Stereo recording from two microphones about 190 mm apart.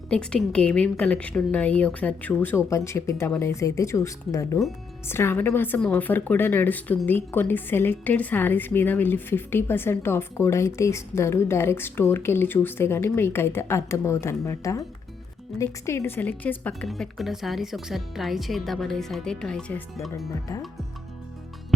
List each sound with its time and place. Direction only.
0.1 s a woman's voice: 5° left (ahead or behind)